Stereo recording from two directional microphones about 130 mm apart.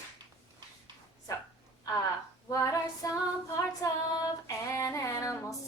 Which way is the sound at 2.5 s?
25° left (ahead or behind).